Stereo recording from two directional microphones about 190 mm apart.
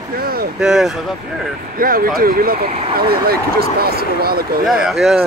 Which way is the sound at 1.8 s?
50° right (ahead or behind).